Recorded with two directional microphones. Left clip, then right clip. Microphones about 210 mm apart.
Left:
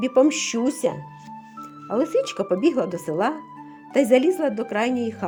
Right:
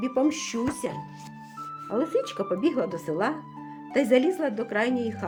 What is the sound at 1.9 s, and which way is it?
A woman's voice, 40° left (ahead or behind).